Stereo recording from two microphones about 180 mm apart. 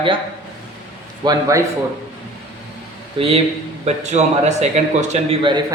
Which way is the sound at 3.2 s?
30° right (ahead or behind).